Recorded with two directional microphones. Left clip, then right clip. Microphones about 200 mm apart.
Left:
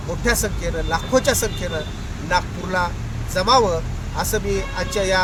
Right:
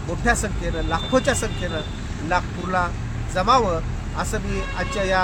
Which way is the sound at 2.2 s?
20° left (ahead or behind).